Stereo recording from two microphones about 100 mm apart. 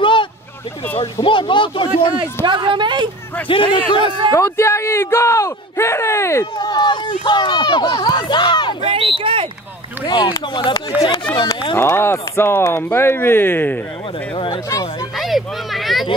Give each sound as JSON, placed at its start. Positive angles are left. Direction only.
{"t": 0.0, "sound": "a sound", "side_deg": 55}
{"t": 1.2, "sound": "speech", "side_deg": 55}
{"t": 2.4, "sound": "speech", "side_deg": -50}
{"t": 3.4, "sound": "speech", "side_deg": 60}
{"t": 4.3, "sound": "speech", "side_deg": 25}
{"t": 6.6, "sound": "speech", "side_deg": 45}
{"t": 8.8, "sound": "speech", "side_deg": -65}
{"t": 10.0, "sound": "speech", "side_deg": 50}
{"t": 10.9, "sound": "speech", "side_deg": -20}
{"t": 11.7, "sound": "speech", "side_deg": 25}
{"t": 14.3, "sound": "speech", "side_deg": 55}
{"t": 14.7, "sound": "speech", "side_deg": 40}
{"t": 15.1, "sound": "a sound", "side_deg": 0}